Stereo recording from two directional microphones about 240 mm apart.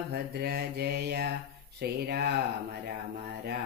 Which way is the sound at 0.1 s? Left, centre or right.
Right.